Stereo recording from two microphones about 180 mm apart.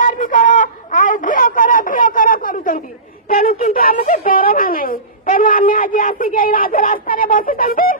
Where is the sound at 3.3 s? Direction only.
50° left (ahead or behind).